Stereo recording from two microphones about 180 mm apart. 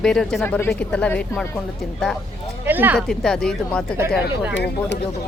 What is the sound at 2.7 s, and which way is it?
Speech, 10° right (ahead or behind).